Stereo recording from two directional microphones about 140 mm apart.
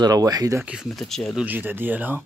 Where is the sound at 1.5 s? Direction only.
15° right (ahead or behind).